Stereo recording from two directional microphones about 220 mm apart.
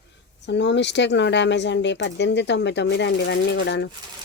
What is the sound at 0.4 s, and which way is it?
A woman's voice, 50° left (ahead or behind).